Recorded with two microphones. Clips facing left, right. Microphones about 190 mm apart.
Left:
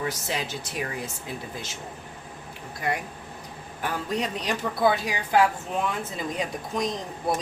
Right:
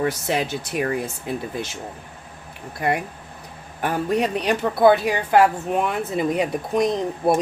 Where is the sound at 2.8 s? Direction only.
60° right (ahead or behind).